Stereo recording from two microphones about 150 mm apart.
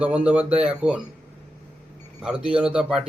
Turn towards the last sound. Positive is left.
turn(degrees=-5)  # may be behind; listen again after turning